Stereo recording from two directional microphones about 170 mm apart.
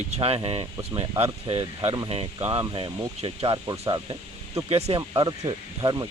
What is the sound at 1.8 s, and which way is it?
Speech, 20° right (ahead or behind).